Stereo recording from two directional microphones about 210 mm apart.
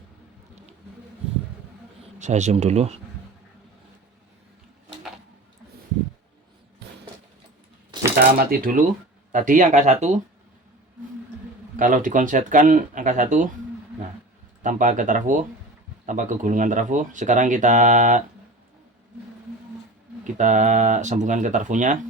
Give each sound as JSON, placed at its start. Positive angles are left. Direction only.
{"t": 2.1, "sound": "speech", "side_deg": -35}
{"t": 8.4, "sound": "speech", "side_deg": -40}
{"t": 11.8, "sound": "speech", "side_deg": -40}
{"t": 14.6, "sound": "speech", "side_deg": -35}
{"t": 20.2, "sound": "speech", "side_deg": -35}